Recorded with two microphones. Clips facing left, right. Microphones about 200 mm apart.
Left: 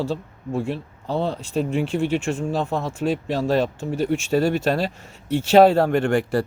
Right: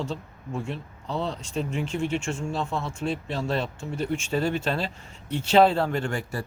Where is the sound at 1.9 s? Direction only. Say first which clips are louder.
Left 5 dB; 35° left (ahead or behind).